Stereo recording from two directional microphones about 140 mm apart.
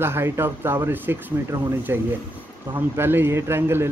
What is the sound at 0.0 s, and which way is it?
Speech, 15° right (ahead or behind).